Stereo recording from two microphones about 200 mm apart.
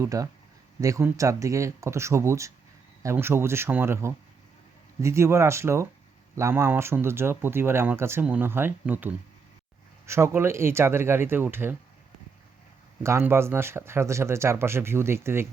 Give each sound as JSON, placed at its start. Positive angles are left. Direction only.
{"t": 0.0, "sound": "speech", "side_deg": -15}
{"t": 13.0, "sound": "speech", "side_deg": -15}